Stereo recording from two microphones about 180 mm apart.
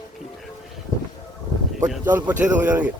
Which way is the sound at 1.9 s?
10° right (ahead or behind).